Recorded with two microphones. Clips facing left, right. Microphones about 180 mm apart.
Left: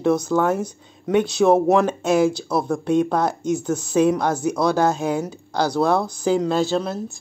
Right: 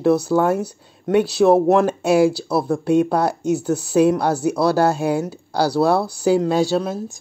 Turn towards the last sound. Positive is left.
turn(degrees=-10)  # may be behind; listen again after turning